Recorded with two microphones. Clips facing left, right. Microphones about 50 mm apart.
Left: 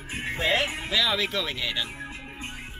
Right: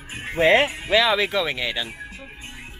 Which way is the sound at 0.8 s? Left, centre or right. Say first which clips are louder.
Right 7 dB; centre.